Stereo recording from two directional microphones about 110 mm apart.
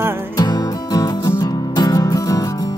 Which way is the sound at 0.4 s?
35° left (ahead or behind).